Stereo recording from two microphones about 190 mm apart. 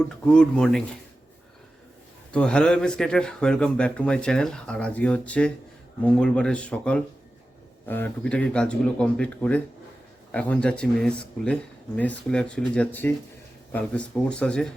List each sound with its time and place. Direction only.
0.3 s speech: 5° left (ahead or behind)
2.3 s speech: 5° left (ahead or behind)